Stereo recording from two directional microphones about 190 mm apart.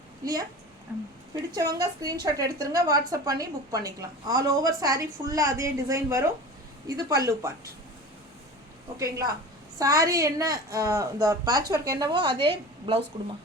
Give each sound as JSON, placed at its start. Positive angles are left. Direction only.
{"t": 0.9, "sound": "a woman's voice", "side_deg": -10}
{"t": 9.0, "sound": "a woman's voice", "side_deg": -15}